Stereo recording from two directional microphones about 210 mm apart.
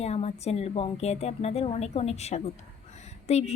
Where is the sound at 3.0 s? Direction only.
30° left (ahead or behind).